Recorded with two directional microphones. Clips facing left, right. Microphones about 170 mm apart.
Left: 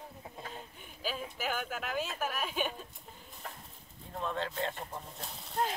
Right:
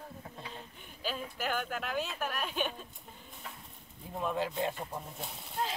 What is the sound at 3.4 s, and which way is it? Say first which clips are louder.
Bird: left 2 dB; 45° left (ahead or behind).